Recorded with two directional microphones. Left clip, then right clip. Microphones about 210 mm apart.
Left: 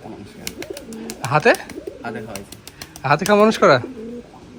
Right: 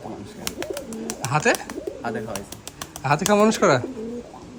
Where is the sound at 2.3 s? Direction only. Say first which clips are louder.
Right 1 dB; 20° right (ahead or behind).